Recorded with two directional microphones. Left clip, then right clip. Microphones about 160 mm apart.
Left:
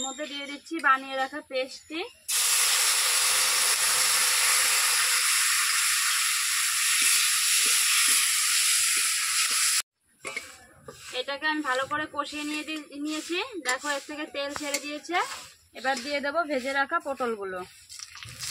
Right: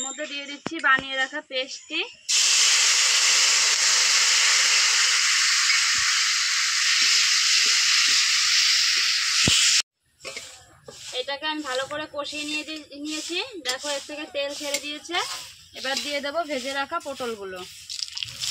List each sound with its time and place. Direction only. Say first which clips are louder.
0.0 s speech: right 2 dB; 10° left (ahead or behind)
0.7 s hiss: right 3 dB; 5° left (ahead or behind); by 9.2 s 20° left (ahead or behind)
9.6 s hiss: right 7 dB; 5° left (ahead or behind)
11.1 s speech: even; centre (ahead or behind)